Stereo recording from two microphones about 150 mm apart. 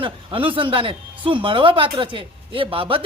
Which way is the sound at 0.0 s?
35° right (ahead or behind).